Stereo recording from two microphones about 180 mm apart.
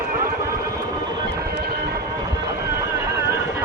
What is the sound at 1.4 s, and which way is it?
Vehicle, 60° right (ahead or behind).